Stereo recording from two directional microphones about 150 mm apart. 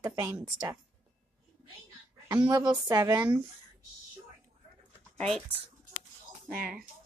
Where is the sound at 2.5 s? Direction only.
25° right (ahead or behind).